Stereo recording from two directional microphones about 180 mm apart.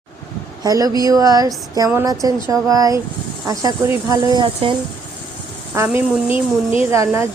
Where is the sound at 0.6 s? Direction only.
20° right (ahead or behind).